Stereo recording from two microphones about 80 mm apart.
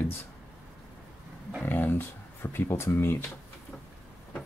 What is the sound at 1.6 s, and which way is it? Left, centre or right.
Speech, left.